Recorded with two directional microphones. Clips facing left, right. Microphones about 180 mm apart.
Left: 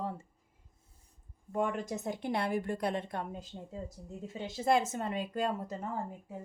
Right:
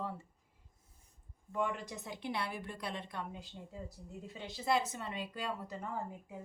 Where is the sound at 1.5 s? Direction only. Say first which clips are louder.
Left 4 dB; 45° left (ahead or behind).